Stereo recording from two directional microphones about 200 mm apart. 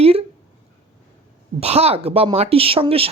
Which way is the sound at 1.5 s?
30° right (ahead or behind).